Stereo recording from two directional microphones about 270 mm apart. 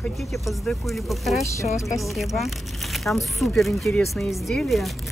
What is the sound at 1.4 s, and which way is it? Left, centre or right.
Speech, centre.